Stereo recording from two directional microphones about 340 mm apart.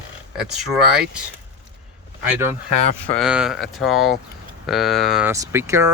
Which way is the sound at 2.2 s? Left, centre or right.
Centre.